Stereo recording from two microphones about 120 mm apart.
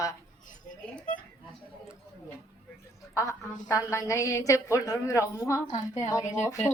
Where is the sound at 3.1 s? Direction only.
25° left (ahead or behind).